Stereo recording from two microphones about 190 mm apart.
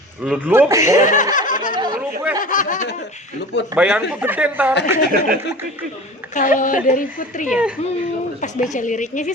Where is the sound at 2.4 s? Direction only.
45° left (ahead or behind).